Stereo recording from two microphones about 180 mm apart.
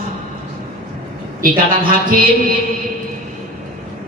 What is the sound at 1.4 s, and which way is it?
Speech, 50° right (ahead or behind).